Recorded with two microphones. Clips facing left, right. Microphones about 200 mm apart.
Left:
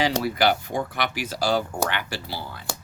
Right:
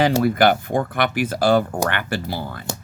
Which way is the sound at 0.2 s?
50° right (ahead or behind).